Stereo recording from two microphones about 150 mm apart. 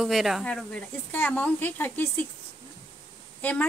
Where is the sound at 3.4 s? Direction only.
10° left (ahead or behind).